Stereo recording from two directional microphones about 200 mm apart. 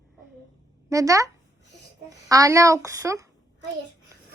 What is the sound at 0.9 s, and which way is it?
Speech, 15° right (ahead or behind).